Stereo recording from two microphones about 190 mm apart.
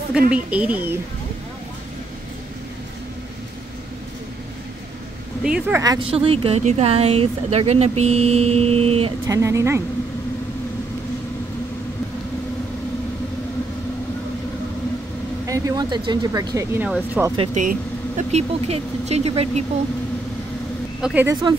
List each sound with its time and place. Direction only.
0.3 s speech: 5° right (ahead or behind)
5.4 s speech: 5° right (ahead or behind)
5.8 s speech: 25° right (ahead or behind)
9.3 s speech: 15° right (ahead or behind)
15.4 s speech: 15° right (ahead or behind)
17.6 s speech: 40° right (ahead or behind)
21.0 s speech: 10° right (ahead or behind)